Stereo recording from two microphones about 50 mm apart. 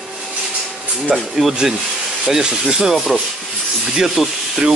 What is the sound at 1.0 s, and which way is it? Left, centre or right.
Sanding, centre.